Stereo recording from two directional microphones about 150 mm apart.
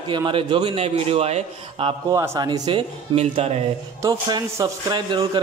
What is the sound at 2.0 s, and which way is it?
Speech, 20° right (ahead or behind).